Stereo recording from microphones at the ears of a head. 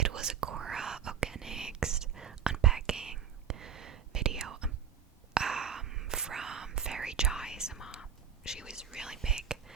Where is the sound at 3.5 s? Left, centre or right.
Right.